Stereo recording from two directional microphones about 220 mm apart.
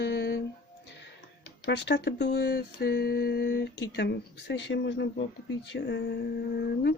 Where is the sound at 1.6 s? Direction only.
50° left (ahead or behind).